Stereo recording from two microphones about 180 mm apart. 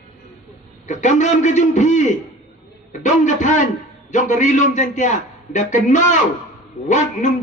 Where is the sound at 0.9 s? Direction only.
40° left (ahead or behind).